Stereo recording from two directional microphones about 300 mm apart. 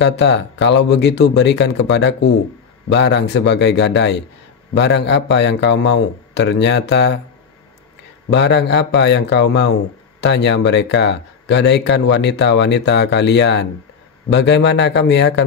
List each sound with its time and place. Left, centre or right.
0.0 s speech: left
8.3 s speech: left